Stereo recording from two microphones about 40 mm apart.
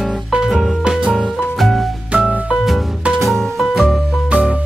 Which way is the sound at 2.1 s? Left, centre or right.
Right.